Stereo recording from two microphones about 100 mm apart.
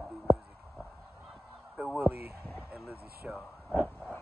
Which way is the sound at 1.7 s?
10° right (ahead or behind).